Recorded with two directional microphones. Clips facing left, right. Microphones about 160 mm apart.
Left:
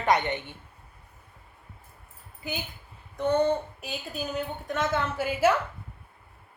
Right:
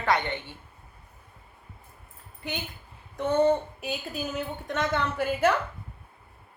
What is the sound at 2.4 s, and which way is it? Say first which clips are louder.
A woman's voice: even; centre (ahead or behind).